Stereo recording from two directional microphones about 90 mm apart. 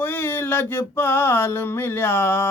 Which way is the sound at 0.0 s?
20° left (ahead or behind).